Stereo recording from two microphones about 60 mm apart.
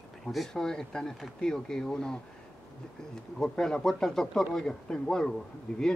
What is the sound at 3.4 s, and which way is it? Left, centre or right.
Speech, centre.